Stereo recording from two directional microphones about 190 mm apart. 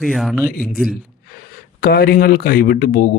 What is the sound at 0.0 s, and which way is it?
Speech, centre (ahead or behind).